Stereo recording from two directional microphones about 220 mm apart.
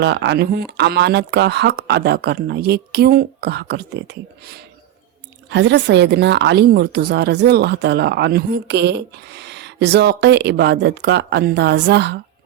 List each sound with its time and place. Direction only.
0.0 s a woman's voice: 50° right (ahead or behind)